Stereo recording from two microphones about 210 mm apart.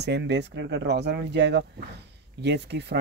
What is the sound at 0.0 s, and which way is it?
Speech, 55° right (ahead or behind).